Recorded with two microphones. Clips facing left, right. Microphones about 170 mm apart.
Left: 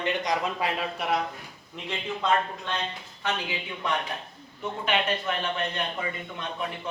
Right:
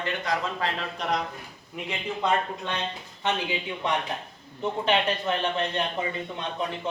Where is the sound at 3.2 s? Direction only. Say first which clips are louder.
Right 3 dB; 20° right (ahead or behind).